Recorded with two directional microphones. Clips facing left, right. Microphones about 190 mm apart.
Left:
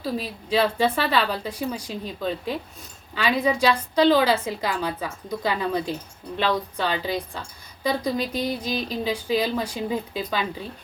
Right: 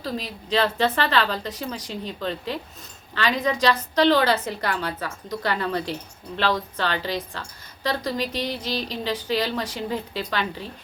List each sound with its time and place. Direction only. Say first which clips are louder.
0.0 s a woman's voice: left 2 dB; 10° left (ahead or behind)